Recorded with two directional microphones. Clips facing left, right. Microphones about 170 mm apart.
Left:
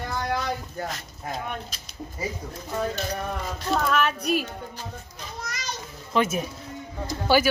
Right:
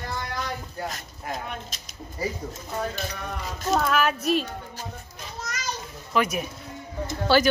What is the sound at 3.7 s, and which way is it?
Speech, 5° right (ahead or behind).